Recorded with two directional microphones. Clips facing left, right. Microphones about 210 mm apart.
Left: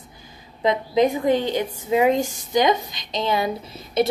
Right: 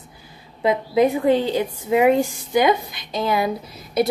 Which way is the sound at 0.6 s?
10° right (ahead or behind).